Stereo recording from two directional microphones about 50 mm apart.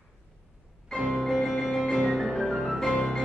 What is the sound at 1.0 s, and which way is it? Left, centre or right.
Music, centre.